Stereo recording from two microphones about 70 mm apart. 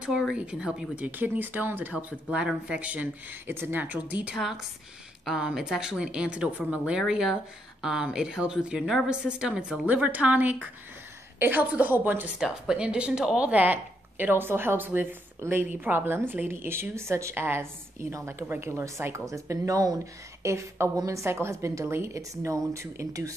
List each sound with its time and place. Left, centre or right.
0.4 s a woman's voice: centre
0.9 s a woman's voice: right
2.2 s a woman's voice: centre
3.4 s a woman's voice: right
5.2 s a woman's voice: centre; by 12.3 s right
12.4 s a woman's voice: centre
13.5 s a woman's voice: right
20.4 s a woman's voice: right